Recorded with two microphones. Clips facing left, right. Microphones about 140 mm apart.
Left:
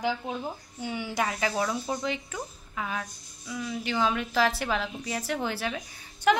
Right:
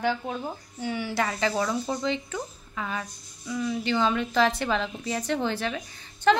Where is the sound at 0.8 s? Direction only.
15° left (ahead or behind).